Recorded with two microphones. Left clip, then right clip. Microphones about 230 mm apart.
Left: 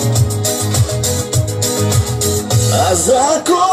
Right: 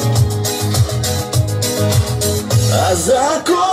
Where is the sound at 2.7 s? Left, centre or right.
Left.